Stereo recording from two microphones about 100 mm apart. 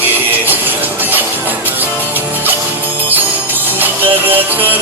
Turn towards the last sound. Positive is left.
turn(degrees=-20)  # may be behind; listen again after turning